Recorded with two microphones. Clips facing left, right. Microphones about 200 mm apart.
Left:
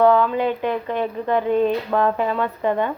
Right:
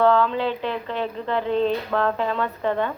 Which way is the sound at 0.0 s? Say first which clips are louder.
Left 3 dB; 15° left (ahead or behind).